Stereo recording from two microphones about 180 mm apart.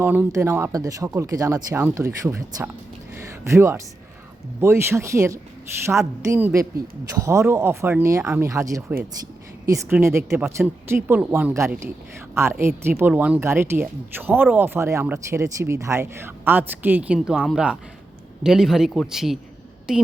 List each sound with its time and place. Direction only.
0.0 s speech: 10° right (ahead or behind)
3.2 s a sound: 15° right (ahead or behind)
4.6 s a woman's voice: 15° right (ahead or behind)